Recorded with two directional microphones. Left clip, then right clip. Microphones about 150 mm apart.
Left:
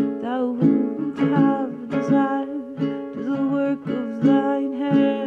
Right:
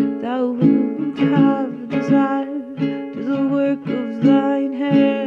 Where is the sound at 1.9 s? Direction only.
25° right (ahead or behind).